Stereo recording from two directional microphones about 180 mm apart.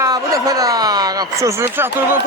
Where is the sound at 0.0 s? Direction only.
20° right (ahead or behind).